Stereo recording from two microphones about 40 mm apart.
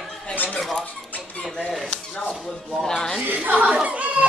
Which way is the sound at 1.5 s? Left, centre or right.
Left.